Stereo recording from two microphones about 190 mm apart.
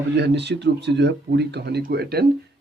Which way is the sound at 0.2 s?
65° right (ahead or behind).